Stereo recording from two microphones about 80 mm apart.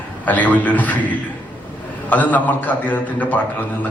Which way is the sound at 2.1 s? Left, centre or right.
Centre.